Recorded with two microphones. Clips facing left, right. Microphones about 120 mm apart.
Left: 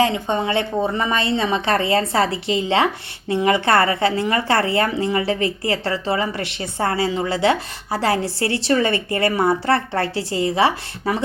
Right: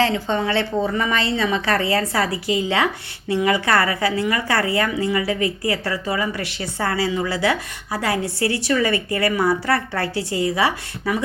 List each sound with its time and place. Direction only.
0.0 s a woman's voice: 20° left (ahead or behind)